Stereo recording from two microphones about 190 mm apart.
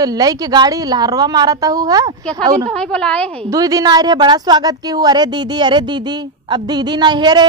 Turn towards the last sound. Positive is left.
turn(degrees=-20)  # may be behind; listen again after turning